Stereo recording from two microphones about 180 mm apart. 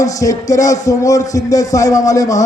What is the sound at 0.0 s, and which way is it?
A man's voice, 20° left (ahead or behind).